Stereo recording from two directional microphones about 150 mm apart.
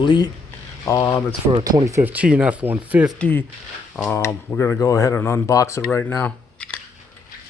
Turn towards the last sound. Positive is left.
turn(degrees=10)  # may be behind; listen again after turning